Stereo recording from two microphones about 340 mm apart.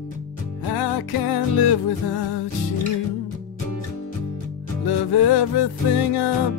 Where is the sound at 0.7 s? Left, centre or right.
Left.